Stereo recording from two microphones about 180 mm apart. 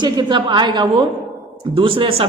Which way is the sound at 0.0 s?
25° right (ahead or behind).